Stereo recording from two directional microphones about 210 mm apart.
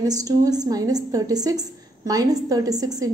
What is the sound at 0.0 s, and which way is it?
A woman's voice, 15° right (ahead or behind).